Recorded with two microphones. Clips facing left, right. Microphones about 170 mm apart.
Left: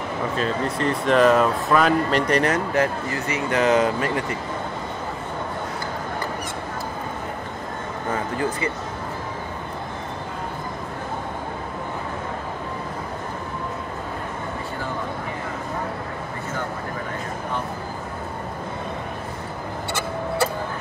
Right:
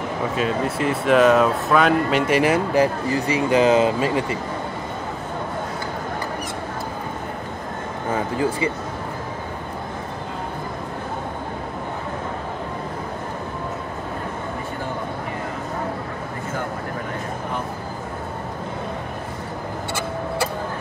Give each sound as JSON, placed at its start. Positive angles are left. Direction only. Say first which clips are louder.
{"t": 0.4, "sound": "speech", "louder": "right 2 dB", "side_deg": -5}
{"t": 3.4, "sound": "speech", "louder": "right 2 dB", "side_deg": -25}
{"t": 8.1, "sound": "speech", "louder": "right 3 dB", "side_deg": -10}